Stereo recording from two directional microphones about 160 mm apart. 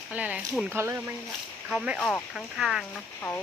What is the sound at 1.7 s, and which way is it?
Speech, centre (ahead or behind).